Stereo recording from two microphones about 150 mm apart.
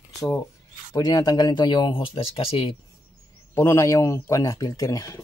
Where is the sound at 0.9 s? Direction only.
25° left (ahead or behind).